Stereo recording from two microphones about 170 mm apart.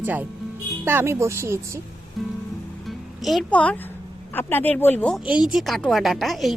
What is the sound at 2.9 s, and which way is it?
Music, centre (ahead or behind).